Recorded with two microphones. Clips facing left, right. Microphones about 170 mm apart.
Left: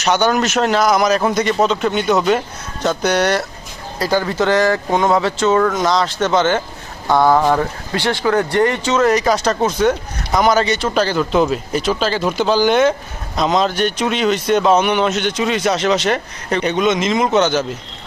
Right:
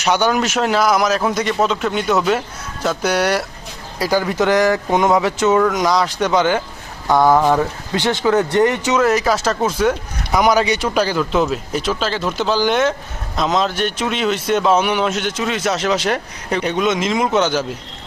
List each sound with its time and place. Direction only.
0.0 s speech: 10° right (ahead or behind)
7.9 s speech: 20° right (ahead or behind)
9.0 s speech: 5° right (ahead or behind)